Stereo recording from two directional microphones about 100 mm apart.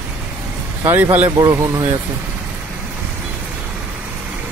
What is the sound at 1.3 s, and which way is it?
Speech, 35° right (ahead or behind).